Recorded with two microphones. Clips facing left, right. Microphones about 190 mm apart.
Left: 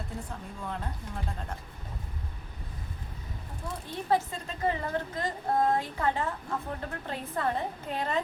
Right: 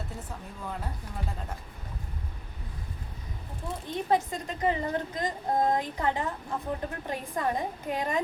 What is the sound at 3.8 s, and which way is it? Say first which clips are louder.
Speech: right 1 dB; 20° right (ahead or behind).